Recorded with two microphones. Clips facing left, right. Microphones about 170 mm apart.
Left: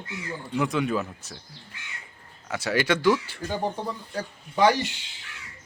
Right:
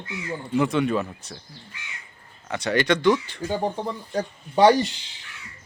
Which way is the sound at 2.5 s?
5° left (ahead or behind).